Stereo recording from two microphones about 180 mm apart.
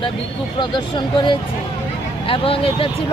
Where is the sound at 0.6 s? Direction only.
25° left (ahead or behind).